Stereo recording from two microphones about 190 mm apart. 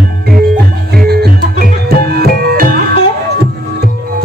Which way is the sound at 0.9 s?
55° right (ahead or behind).